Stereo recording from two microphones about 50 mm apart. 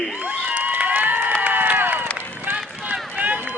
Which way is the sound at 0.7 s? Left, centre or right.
Right.